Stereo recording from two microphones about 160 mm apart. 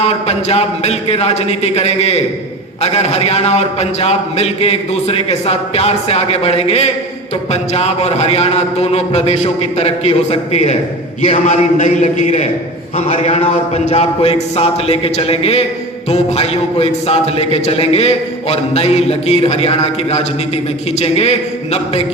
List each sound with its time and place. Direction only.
0.0 s a man's voice: 40° left (ahead or behind)